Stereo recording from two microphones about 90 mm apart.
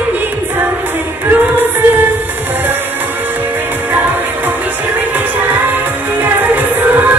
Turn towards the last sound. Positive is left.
turn(degrees=-20)  # may be behind; listen again after turning